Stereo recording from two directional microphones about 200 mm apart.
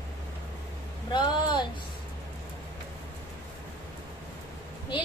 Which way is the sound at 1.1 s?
20° left (ahead or behind).